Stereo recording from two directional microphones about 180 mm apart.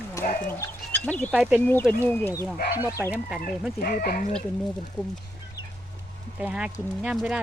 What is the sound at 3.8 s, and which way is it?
Speech, 55° left (ahead or behind).